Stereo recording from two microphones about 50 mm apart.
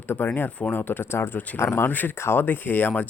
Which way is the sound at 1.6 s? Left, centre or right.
Left.